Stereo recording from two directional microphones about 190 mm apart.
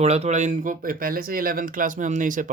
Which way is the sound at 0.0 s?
35° right (ahead or behind).